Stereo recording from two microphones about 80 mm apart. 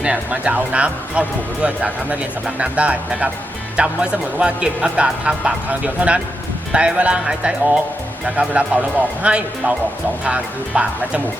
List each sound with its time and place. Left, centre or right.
0.0 s speech: centre